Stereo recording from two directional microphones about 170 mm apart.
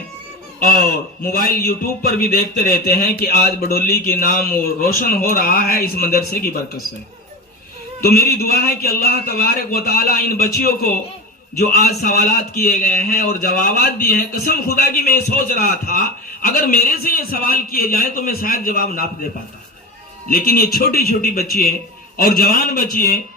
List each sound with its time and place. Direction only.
1.3 s a man's voice: 60° left (ahead or behind)
8.0 s a man's voice: 65° left (ahead or behind)
20.3 s a man's voice: 60° left (ahead or behind)